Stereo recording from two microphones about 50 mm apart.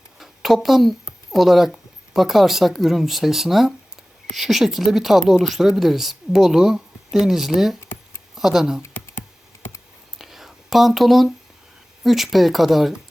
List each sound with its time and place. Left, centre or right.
0.2 s a sound: centre
1.3 s a woman's voice: centre
8.8 s computer keyboard: left
10.2 s whispering: centre
12.0 s a woman's voice: centre